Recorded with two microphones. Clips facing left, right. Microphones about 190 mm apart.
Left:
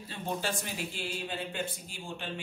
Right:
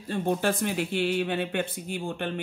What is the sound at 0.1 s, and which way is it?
Speech, 55° right (ahead or behind).